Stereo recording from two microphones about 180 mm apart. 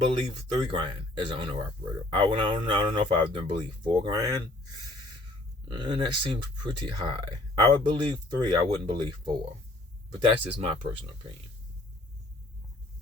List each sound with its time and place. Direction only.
0.5 s speech: 30° right (ahead or behind)
5.6 s speech: 25° right (ahead or behind)